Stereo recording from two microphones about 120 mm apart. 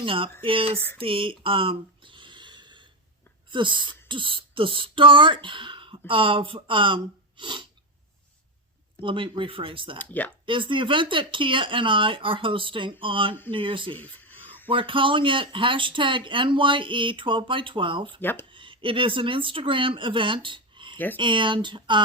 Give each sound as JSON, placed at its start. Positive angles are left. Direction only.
{"t": 0.0, "sound": "speech", "side_deg": -50}
{"t": 0.9, "sound": "a sound", "side_deg": -50}
{"t": 3.5, "sound": "speech", "side_deg": -40}
{"t": 9.0, "sound": "speech", "side_deg": -45}
{"t": 10.0, "sound": "speech", "side_deg": 15}
{"t": 10.4, "sound": "speech", "side_deg": -45}
{"t": 13.9, "sound": "a sound", "side_deg": 15}
{"t": 14.7, "sound": "speech", "side_deg": -45}
{"t": 18.2, "sound": "speech", "side_deg": 15}
{"t": 18.5, "sound": "speech", "side_deg": -45}